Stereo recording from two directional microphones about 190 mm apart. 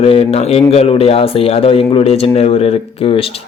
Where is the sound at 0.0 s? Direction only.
30° left (ahead or behind).